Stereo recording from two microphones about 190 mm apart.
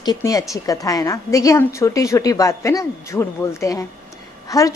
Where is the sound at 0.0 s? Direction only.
20° left (ahead or behind).